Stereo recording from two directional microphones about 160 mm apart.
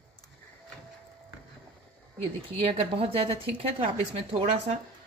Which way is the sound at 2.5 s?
35° right (ahead or behind).